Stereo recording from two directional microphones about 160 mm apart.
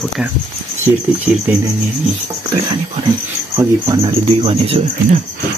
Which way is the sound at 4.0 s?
35° right (ahead or behind).